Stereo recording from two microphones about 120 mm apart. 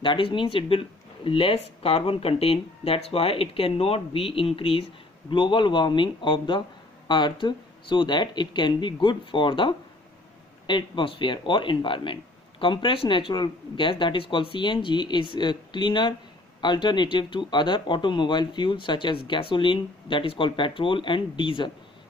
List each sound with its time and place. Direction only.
0.0 s speech: 45° left (ahead or behind)